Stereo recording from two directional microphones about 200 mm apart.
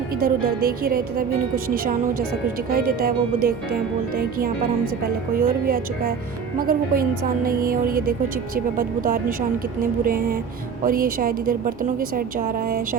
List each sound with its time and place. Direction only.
0.2 s speech: 50° right (ahead or behind)